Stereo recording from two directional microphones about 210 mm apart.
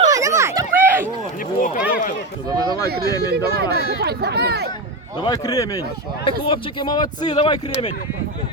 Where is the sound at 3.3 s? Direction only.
50° right (ahead or behind).